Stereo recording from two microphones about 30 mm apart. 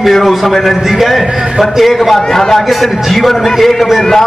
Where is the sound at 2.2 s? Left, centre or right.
Centre.